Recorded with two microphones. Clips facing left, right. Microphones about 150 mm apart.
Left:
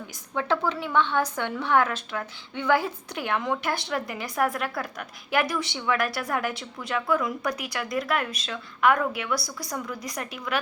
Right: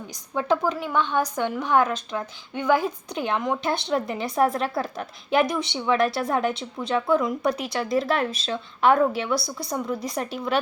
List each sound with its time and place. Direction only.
0.1 s a woman's voice: 15° right (ahead or behind)